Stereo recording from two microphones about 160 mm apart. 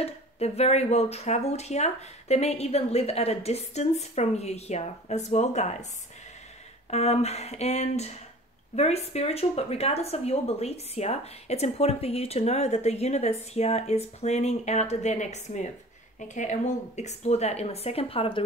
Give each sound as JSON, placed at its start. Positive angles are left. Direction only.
{"t": 0.0, "sound": "speech", "side_deg": 40}
{"t": 6.9, "sound": "speech", "side_deg": 40}